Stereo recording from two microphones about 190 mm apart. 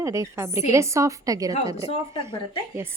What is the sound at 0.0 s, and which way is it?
A woman's voice, 15° right (ahead or behind).